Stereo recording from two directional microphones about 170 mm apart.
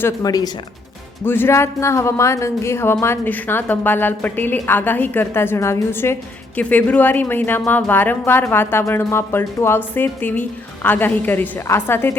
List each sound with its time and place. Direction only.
0.0 s speech: 20° left (ahead or behind)